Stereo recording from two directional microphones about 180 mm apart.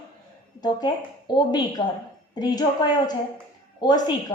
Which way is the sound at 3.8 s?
25° left (ahead or behind).